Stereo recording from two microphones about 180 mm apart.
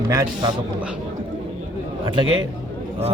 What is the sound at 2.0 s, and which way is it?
Speech, 25° right (ahead or behind).